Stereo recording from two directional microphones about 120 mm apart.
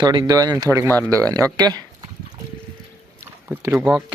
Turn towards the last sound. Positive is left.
turn(degrees=-10)  # may be behind; listen again after turning